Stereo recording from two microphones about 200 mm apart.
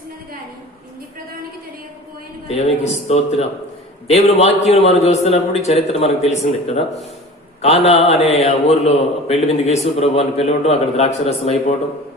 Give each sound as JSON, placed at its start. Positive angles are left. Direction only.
{"t": 2.9, "sound": "a man's voice", "side_deg": 30}